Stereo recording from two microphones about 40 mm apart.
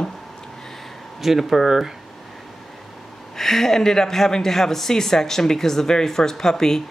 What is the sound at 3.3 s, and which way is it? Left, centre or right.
Speech, centre.